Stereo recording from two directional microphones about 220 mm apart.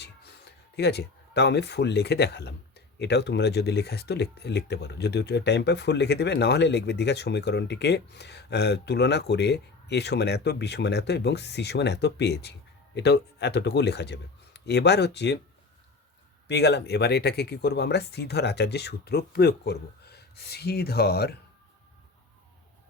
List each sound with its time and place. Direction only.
0.0 s speech: 45° left (ahead or behind)
16.5 s speech: 50° left (ahead or behind)